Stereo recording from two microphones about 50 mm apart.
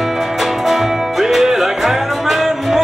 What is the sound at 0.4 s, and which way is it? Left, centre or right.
Music, centre.